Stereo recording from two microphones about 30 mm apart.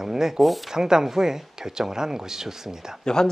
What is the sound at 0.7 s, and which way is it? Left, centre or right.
Speech, centre.